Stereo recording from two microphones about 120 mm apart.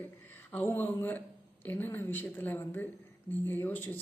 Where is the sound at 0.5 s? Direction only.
15° left (ahead or behind).